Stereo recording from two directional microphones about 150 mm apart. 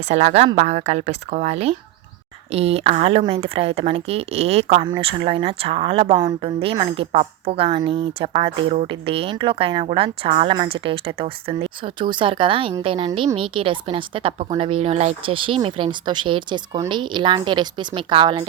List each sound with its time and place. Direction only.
0.1 s speech: 50° right (ahead or behind); by 18.4 s 30° right (ahead or behind)